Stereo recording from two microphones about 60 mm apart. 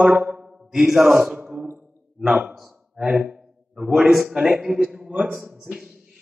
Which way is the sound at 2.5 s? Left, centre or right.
Centre.